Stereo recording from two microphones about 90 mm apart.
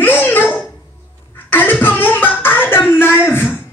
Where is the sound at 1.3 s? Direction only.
20° left (ahead or behind).